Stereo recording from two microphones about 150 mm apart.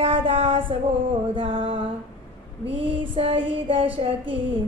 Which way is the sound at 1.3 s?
35° right (ahead or behind).